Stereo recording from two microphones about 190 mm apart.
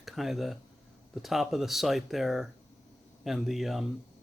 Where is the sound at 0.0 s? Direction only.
Centre (ahead or behind).